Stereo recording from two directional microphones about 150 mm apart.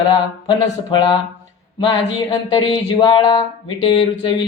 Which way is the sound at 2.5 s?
30° left (ahead or behind).